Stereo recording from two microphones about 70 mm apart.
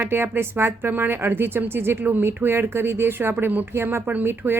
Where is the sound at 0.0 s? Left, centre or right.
Right.